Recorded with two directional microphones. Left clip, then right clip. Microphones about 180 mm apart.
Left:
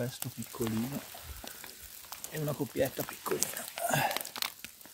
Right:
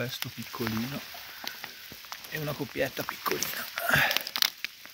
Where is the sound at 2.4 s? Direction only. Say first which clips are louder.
Even; 5° left (ahead or behind).